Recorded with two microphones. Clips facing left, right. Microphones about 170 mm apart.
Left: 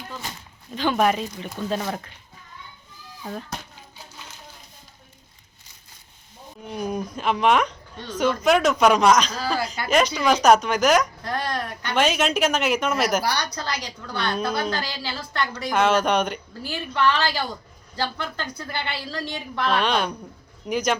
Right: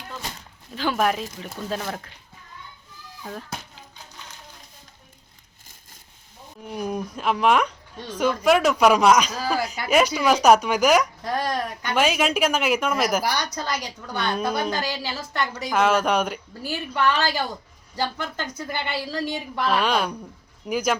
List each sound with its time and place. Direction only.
0.8 s speech: 5° right (ahead or behind)
6.7 s speech: centre (ahead or behind); by 15.6 s 20° right (ahead or behind)
15.7 s speech: 5° right (ahead or behind)
16.6 s speech: 15° right (ahead or behind)